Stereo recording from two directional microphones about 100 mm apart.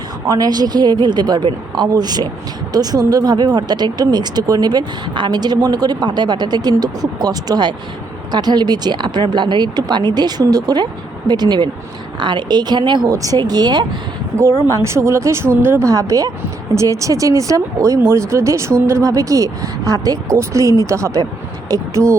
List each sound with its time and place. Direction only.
0.3 s speech: 40° right (ahead or behind)
13.1 s speech: 35° right (ahead or behind)
14.3 s speech: 30° right (ahead or behind)